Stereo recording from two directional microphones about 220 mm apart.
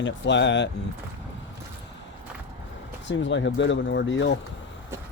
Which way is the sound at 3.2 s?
55° left (ahead or behind).